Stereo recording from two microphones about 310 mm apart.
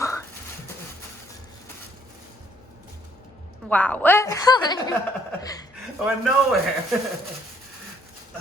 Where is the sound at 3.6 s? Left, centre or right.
Centre.